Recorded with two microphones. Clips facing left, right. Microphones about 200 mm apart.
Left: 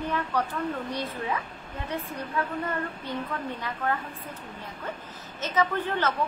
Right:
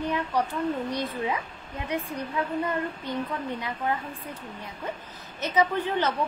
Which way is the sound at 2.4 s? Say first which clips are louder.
Even; 15° right (ahead or behind).